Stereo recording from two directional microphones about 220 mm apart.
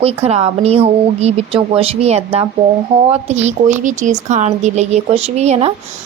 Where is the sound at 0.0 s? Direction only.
30° right (ahead or behind).